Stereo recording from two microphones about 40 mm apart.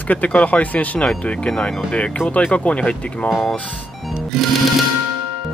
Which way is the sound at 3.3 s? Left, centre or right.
Centre.